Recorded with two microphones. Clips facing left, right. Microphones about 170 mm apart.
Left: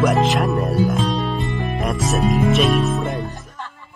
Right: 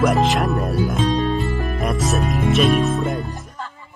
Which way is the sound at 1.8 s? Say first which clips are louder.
Left 1 dB; centre (ahead or behind).